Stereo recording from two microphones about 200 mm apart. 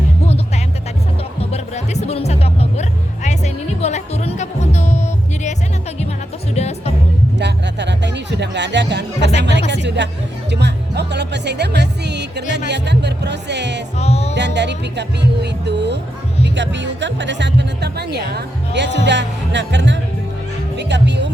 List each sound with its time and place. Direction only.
1.4 s music: 30° left (ahead or behind)
7.3 s music: 60° right (ahead or behind)
14.0 s music: 30° left (ahead or behind)
14.3 s music: 60° right (ahead or behind)